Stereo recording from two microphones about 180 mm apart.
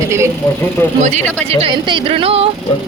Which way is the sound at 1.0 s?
40° right (ahead or behind).